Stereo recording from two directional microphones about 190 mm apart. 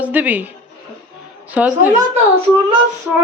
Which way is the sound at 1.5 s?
10° right (ahead or behind).